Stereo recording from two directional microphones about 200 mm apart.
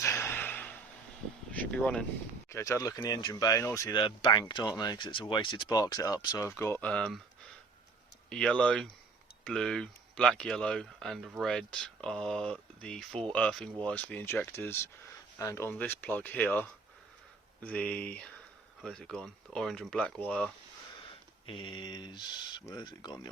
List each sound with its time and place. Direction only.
0.0 s a sound: 10° left (ahead or behind)
1.5 s speech: 5° left (ahead or behind)
8.3 s speech: 5° left (ahead or behind)
21.4 s speech: 25° left (ahead or behind)